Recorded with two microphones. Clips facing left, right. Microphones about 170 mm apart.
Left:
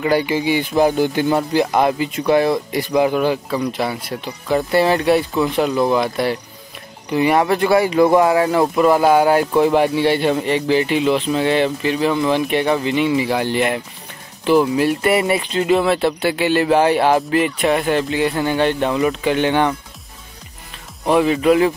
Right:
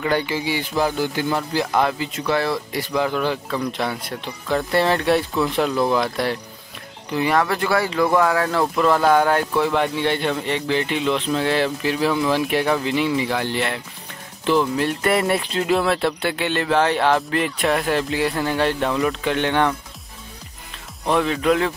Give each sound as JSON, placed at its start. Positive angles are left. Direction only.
{"t": 0.0, "sound": "speech", "side_deg": 10}
{"t": 7.1, "sound": "speech", "side_deg": 15}
{"t": 21.0, "sound": "speech", "side_deg": 10}